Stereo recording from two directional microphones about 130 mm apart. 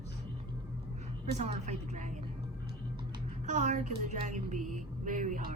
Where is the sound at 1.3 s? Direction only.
60° right (ahead or behind).